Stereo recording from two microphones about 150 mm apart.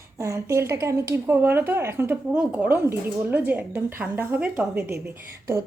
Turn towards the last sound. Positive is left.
turn(degrees=-20)  # may be behind; listen again after turning